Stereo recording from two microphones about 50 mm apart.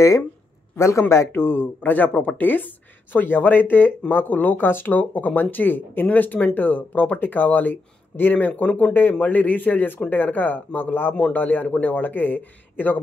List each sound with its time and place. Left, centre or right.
0.7 s a man's voice: left
1.0 s speech: left
1.8 s speech: left